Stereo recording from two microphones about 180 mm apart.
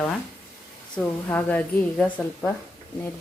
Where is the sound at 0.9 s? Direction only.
10° left (ahead or behind).